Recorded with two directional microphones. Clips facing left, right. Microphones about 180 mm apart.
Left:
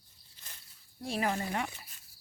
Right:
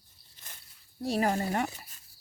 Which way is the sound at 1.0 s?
40° right (ahead or behind).